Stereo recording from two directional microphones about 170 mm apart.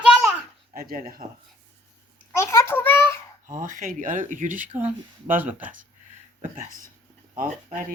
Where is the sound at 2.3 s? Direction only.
15° left (ahead or behind).